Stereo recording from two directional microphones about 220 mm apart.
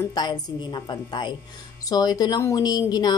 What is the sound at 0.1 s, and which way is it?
Speech, 20° left (ahead or behind).